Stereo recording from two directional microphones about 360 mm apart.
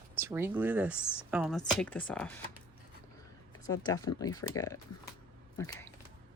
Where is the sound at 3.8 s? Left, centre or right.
Centre.